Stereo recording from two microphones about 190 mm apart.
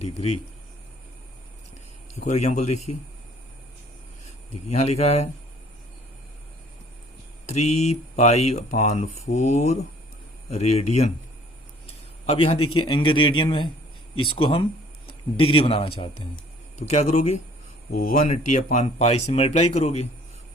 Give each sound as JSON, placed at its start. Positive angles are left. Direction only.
{"t": 2.1, "sound": "speech", "side_deg": 35}
{"t": 4.7, "sound": "speech", "side_deg": 35}
{"t": 7.4, "sound": "speech", "side_deg": 35}
{"t": 12.2, "sound": "a man's voice", "side_deg": 35}